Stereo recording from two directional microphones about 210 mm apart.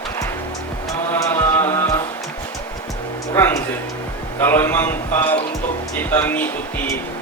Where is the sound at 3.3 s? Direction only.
10° left (ahead or behind).